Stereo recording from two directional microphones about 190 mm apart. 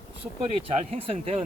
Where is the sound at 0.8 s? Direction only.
30° right (ahead or behind).